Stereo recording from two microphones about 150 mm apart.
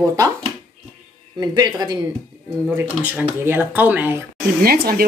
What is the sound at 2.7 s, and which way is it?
Speech, 10° right (ahead or behind).